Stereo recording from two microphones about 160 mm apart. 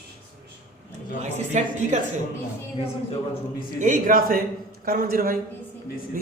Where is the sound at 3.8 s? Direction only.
60° right (ahead or behind).